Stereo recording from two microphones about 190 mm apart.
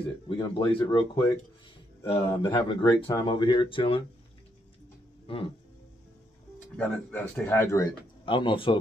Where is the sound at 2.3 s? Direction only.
25° left (ahead or behind).